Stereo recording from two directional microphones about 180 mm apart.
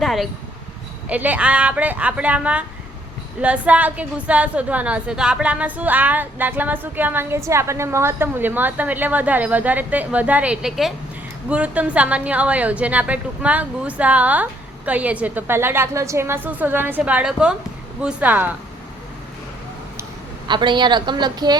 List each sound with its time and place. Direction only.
0.0 s a woman's voice: centre (ahead or behind)
20.5 s a woman's voice: 25° right (ahead or behind)